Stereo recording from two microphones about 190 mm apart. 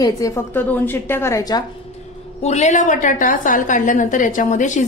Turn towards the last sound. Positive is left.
turn(degrees=40)  # may be behind; listen again after turning